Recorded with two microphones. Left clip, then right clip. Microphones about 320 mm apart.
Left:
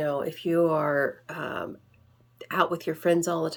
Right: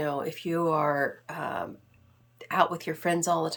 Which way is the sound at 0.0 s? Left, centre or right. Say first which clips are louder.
Left 2 dB; right.